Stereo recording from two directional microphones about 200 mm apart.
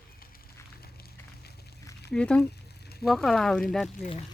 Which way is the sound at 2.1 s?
5° left (ahead or behind).